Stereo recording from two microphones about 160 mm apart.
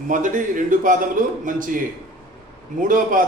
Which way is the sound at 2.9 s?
60° right (ahead or behind).